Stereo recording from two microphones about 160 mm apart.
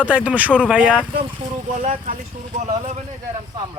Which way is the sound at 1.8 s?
45° right (ahead or behind).